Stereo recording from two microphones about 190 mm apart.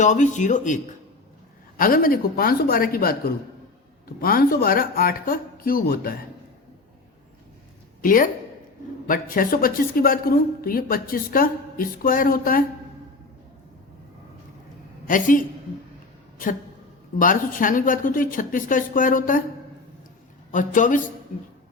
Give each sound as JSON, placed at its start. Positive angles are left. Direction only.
{"t": 0.0, "sound": "speech", "side_deg": 40}
{"t": 1.8, "sound": "a woman's voice", "side_deg": 50}
{"t": 8.0, "sound": "a woman's voice", "side_deg": 45}
{"t": 15.0, "sound": "a woman's voice", "side_deg": 45}
{"t": 17.2, "sound": "a woman's voice", "side_deg": 45}
{"t": 20.5, "sound": "a woman's voice", "side_deg": 45}